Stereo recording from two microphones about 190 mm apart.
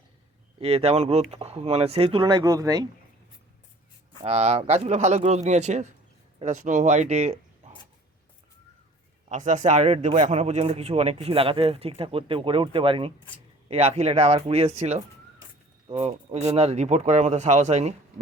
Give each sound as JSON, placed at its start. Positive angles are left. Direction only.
{"t": 0.6, "sound": "a man's voice", "side_deg": -30}
{"t": 4.2, "sound": "a man's voice", "side_deg": -35}
{"t": 9.3, "sound": "a man's voice", "side_deg": -40}